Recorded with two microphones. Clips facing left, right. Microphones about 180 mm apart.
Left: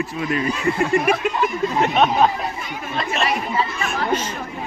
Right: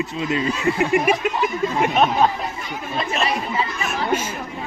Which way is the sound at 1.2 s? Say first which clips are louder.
Left 1 dB; 5° right (ahead or behind).